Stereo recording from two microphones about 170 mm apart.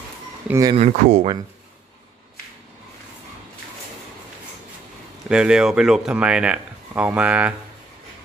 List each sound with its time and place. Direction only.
0.5 s speech: 20° right (ahead or behind)
0.7 s speech: 45° right (ahead or behind)
5.3 s speech: 5° right (ahead or behind)